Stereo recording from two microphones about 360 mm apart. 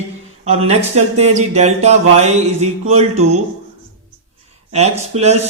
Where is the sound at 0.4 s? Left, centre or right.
Centre.